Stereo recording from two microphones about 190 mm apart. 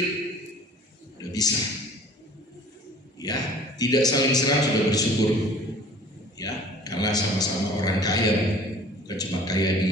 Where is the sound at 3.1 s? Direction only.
20° left (ahead or behind).